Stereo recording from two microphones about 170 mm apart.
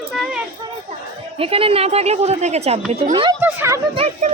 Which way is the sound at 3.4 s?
15° right (ahead or behind).